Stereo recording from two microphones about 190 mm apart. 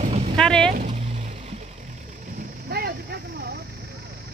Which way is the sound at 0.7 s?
35° right (ahead or behind).